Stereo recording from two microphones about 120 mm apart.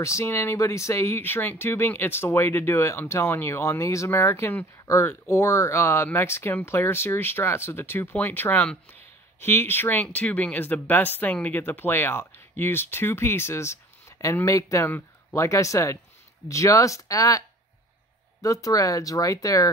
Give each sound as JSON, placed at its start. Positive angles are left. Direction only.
{"t": 0.0, "sound": "speech", "side_deg": 25}
{"t": 18.4, "sound": "speech", "side_deg": 30}